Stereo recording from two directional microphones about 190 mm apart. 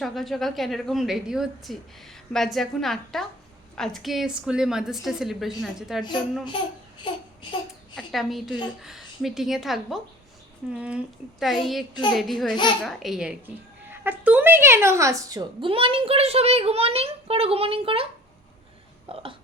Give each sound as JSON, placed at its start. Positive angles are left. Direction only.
{"t": 0.0, "sound": "a woman's voice", "side_deg": 0}
{"t": 7.1, "sound": "a sound", "side_deg": 25}
{"t": 7.9, "sound": "a woman's voice", "side_deg": 0}